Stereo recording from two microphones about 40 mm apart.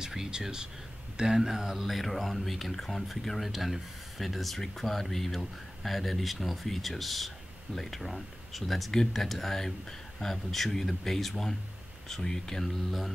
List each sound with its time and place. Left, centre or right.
0.0 s speech: centre